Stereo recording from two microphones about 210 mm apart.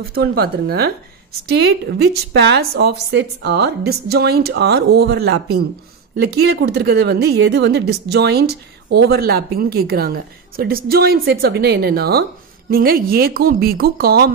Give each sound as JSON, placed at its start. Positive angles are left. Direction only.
{"t": 0.1, "sound": "a woman's voice", "side_deg": -50}